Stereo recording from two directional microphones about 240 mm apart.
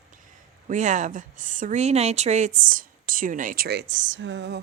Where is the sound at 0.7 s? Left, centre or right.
Right.